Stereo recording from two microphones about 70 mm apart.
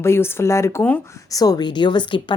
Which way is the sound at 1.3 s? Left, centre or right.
Left.